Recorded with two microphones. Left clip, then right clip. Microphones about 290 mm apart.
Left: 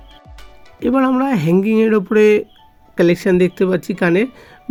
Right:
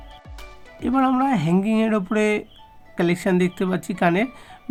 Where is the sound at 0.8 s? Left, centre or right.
Centre.